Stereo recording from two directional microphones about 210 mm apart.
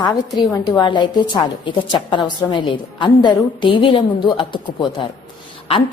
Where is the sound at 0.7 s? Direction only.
20° left (ahead or behind).